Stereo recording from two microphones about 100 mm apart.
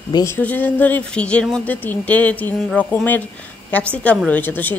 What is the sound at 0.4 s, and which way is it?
A woman's voice, 15° left (ahead or behind).